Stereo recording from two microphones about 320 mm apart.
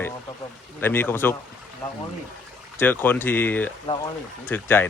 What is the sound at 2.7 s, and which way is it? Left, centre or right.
Speech, centre.